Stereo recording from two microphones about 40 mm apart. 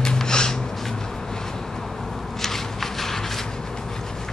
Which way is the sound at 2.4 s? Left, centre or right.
Centre.